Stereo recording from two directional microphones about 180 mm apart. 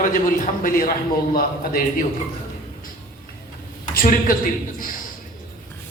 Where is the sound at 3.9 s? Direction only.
55° left (ahead or behind).